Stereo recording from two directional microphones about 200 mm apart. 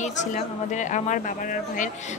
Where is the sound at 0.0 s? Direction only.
35° left (ahead or behind).